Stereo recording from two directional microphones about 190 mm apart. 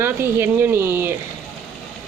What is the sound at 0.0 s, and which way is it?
Speech, 10° right (ahead or behind).